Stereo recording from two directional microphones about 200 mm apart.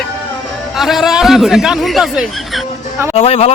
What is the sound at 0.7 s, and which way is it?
A man's voice, centre (ahead or behind).